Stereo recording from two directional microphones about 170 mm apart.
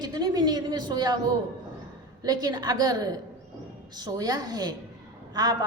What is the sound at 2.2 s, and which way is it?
A woman's voice, 20° right (ahead or behind).